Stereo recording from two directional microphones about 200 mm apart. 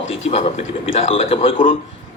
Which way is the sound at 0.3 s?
30° left (ahead or behind).